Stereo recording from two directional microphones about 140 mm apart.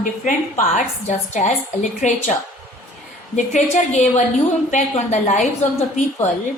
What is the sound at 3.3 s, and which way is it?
A woman's voice, 60° left (ahead or behind).